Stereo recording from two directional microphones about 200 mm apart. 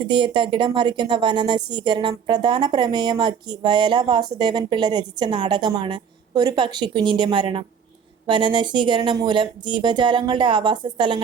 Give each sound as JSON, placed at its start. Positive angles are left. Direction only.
{"t": 0.1, "sound": "a woman's voice", "side_deg": -25}